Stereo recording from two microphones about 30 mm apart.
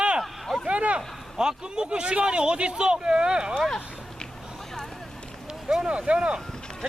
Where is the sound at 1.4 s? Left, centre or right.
Right.